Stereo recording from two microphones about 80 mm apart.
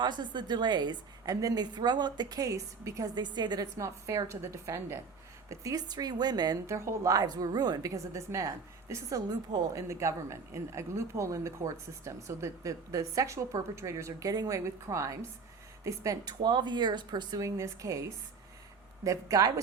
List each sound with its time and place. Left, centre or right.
0.0 s a woman's voice: right
3.2 s a woman's voice: right
3.8 s speech: right
5.5 s a woman's voice: right
6.7 s a woman's voice: right
9.7 s a woman's voice: right
17.4 s speech: right
19.0 s a woman's voice: right